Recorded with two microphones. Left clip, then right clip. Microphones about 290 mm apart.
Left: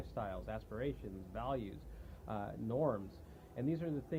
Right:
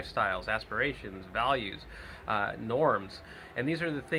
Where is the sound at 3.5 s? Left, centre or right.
Centre.